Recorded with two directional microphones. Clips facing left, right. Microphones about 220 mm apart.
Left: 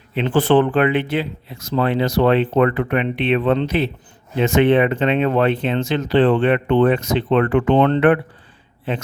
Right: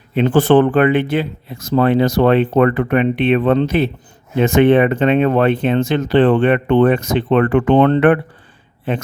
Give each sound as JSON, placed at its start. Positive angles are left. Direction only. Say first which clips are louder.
{"t": 0.1, "sound": "speech", "louder": "right 4 dB", "side_deg": -45}